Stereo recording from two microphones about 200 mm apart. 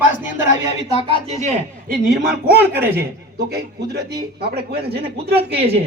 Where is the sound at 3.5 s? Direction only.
55° right (ahead or behind).